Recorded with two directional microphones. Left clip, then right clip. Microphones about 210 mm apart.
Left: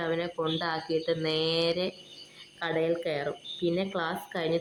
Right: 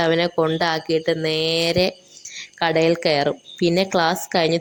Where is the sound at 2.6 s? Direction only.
45° right (ahead or behind).